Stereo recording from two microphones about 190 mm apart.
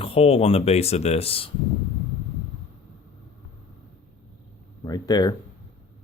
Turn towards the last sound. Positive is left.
turn(degrees=20)  # may be behind; listen again after turning